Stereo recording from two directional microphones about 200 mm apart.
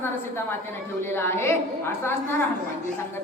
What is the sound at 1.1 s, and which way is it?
A woman's voice, 10° left (ahead or behind).